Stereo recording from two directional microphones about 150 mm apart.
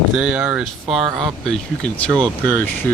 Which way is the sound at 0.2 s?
5° right (ahead or behind).